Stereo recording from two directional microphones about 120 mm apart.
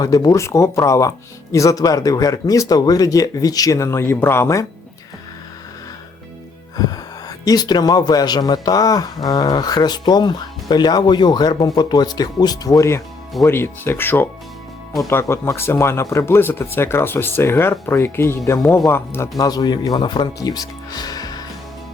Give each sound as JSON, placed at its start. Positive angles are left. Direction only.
{"t": 0.0, "sound": "speech", "side_deg": 30}
{"t": 6.7, "sound": "speech", "side_deg": 30}
{"t": 19.4, "sound": "speech", "side_deg": 35}